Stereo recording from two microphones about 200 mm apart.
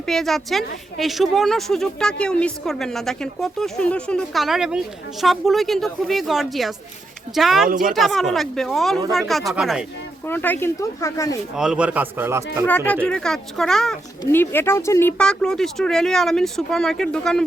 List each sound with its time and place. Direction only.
0.0 s a woman's voice: centre (ahead or behind)
7.7 s speech: 45° right (ahead or behind)
7.9 s a woman's voice: centre (ahead or behind)
10.2 s speech: 10° left (ahead or behind)
11.5 s speech: 5° right (ahead or behind)
12.6 s a woman's voice: 10° left (ahead or behind)